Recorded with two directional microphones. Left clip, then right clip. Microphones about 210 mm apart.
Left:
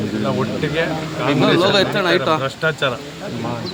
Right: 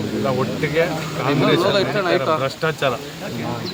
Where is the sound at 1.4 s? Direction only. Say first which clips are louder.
Left 3 dB; 50° left (ahead or behind).